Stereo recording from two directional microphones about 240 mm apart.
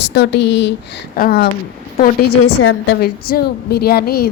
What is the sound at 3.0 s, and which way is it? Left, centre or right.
Speech, left.